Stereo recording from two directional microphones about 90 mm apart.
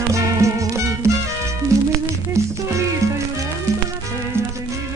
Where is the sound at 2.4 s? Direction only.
35° right (ahead or behind).